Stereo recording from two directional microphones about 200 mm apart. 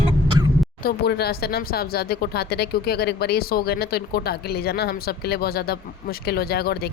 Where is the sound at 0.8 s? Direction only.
50° left (ahead or behind).